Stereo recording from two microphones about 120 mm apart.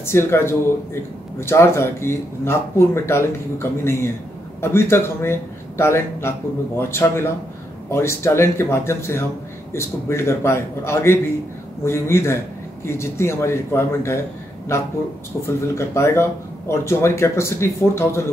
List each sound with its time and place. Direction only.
0.0 s speech: 20° left (ahead or behind)